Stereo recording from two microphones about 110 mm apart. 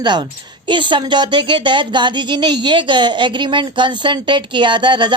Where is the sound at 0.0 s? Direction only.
45° right (ahead or behind).